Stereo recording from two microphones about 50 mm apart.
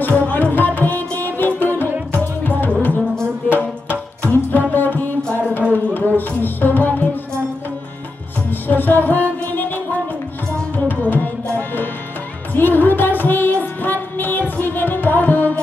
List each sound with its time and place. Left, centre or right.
0.0 s music: left
5.6 s a sound: right
6.1 s music: left
8.5 s music: left
10.9 s music: left